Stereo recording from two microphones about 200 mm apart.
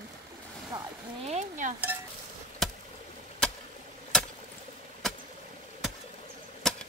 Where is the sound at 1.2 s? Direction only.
35° right (ahead or behind).